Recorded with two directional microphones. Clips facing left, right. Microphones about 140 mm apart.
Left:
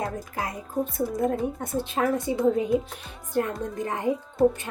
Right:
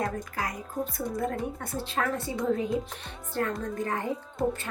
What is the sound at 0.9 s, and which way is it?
A woman's voice, 20° left (ahead or behind).